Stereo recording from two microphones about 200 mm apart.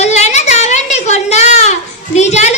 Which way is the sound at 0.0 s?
35° left (ahead or behind).